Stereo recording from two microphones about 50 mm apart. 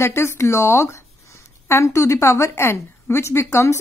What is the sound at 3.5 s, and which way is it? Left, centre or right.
Speech, left.